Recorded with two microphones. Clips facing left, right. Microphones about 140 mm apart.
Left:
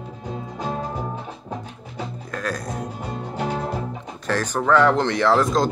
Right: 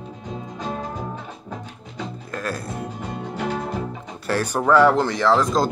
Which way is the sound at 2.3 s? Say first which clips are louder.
Left 1 dB; 5° right (ahead or behind).